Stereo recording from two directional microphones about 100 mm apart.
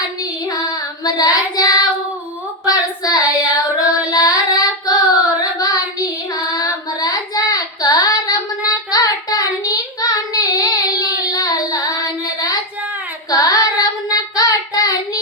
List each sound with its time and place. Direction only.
0.2 s child singing: 35° left (ahead or behind)